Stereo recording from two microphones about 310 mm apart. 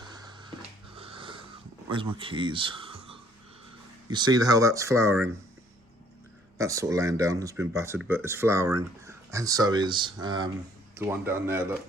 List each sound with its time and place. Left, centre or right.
0.0 s a sound: centre
0.9 s wheeze: centre
1.9 s speech: centre
6.6 s speech: centre